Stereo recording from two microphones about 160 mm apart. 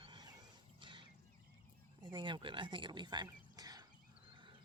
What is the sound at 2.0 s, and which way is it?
Speech, 30° right (ahead or behind).